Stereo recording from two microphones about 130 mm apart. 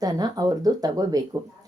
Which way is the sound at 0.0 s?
30° right (ahead or behind).